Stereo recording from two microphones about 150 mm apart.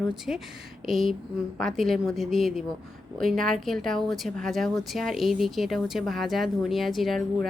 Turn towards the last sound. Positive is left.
turn(degrees=0)  # may be behind; listen again after turning